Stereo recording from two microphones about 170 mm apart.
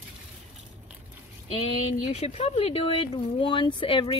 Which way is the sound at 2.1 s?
40° left (ahead or behind).